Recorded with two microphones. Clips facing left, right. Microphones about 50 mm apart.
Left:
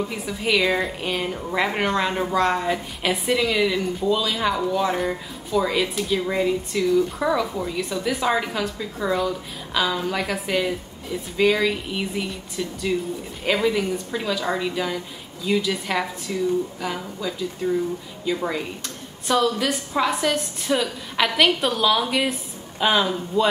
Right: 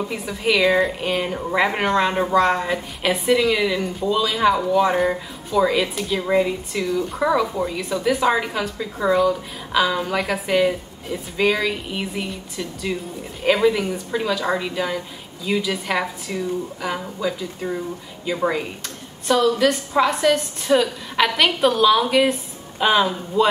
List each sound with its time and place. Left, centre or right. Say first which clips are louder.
0.0 s a woman's voice: right 2 dB; centre
1.2 s a woman's voice: right 3 dB; centre
1.6 s a woman's voice: right 3 dB; centre